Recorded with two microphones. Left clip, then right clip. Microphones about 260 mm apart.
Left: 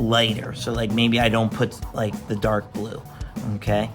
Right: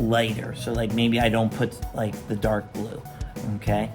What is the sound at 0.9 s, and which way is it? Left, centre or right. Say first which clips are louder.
Speech: left 3 dB; left.